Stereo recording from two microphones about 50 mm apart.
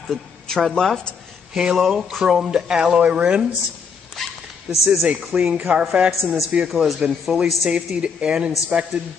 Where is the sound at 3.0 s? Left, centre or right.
Right.